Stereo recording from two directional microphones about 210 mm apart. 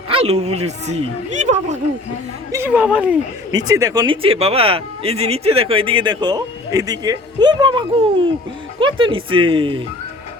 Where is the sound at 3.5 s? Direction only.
15° right (ahead or behind).